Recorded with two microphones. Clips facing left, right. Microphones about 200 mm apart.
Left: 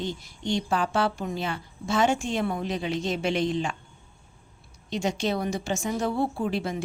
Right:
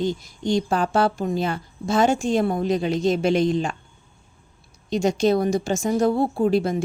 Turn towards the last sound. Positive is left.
turn(degrees=-40)  # may be behind; listen again after turning